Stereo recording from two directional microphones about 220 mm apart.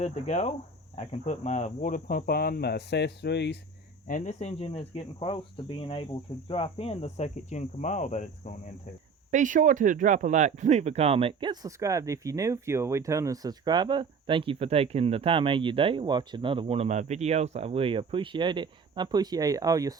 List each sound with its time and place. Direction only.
0.0 s speech: 30° left (ahead or behind); by 3.6 s 50° left (ahead or behind)
4.0 s speech: 35° left (ahead or behind)
9.3 s speech: 35° right (ahead or behind); by 20.0 s 15° right (ahead or behind)